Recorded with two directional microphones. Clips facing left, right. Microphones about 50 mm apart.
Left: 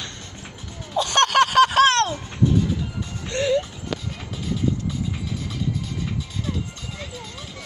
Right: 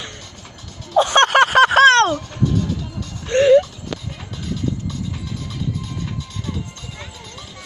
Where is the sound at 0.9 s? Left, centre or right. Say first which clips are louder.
Right 5 dB; right.